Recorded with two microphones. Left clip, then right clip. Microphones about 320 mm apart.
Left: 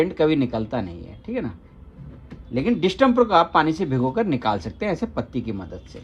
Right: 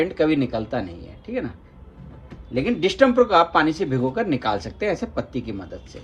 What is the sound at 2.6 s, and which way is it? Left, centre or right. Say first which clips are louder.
Speech: right 1 dB; left.